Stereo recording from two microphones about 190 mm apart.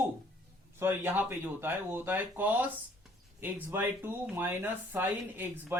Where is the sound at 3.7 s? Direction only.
10° right (ahead or behind).